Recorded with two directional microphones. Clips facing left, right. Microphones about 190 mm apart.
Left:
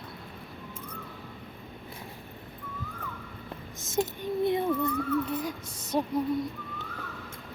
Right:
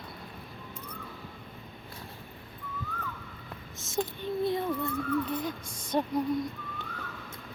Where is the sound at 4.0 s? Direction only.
15° left (ahead or behind).